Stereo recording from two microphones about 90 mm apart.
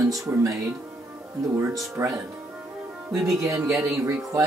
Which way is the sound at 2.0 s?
25° right (ahead or behind).